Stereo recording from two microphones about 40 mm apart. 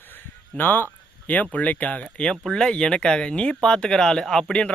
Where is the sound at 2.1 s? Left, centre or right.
Left.